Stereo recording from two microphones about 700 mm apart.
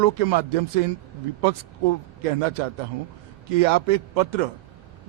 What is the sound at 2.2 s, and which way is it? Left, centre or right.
A man's voice, right.